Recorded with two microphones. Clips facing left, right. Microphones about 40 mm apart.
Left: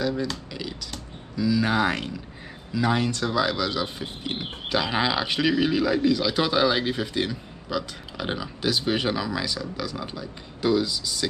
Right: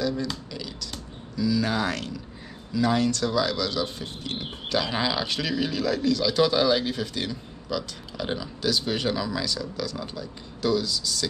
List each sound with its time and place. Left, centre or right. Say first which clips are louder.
0.0 s speech: left 1 dB; centre
0.5 s a sound: left 2 dB; centre
1.3 s speech: left 2 dB; centre